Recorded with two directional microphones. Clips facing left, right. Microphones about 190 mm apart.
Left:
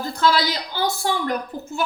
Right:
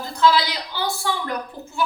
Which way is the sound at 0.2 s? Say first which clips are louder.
Right 2 dB; 45° left (ahead or behind).